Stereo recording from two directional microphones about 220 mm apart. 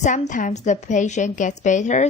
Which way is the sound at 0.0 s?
35° left (ahead or behind).